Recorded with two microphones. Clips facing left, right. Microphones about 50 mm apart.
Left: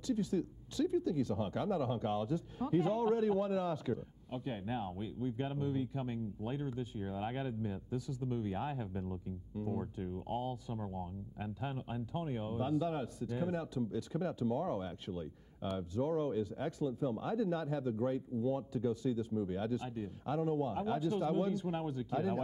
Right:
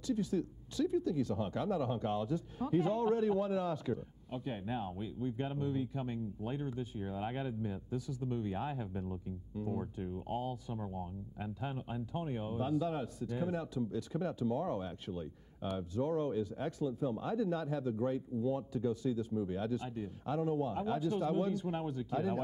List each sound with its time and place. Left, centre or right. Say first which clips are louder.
0.0 s speech: even; centre